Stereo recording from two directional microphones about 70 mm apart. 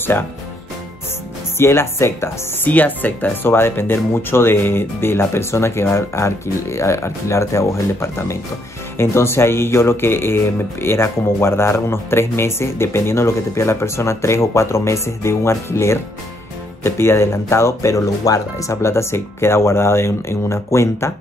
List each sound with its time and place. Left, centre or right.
1.6 s speech: left
2.6 s speech: left